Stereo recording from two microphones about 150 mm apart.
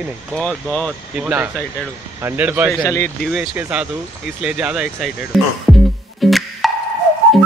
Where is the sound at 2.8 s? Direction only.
20° left (ahead or behind).